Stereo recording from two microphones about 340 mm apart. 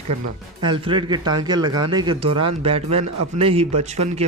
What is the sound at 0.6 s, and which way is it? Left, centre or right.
Speech, centre.